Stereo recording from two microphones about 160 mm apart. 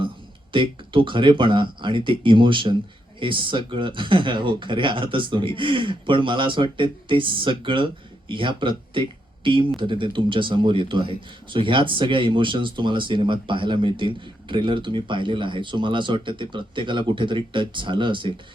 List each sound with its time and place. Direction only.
0.5 s speech: 30° right (ahead or behind)